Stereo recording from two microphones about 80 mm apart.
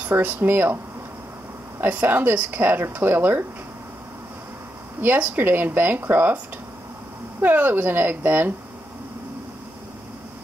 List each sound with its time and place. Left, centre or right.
0.2 s speech: right
1.8 s speech: right
5.0 s speech: right
7.4 s speech: right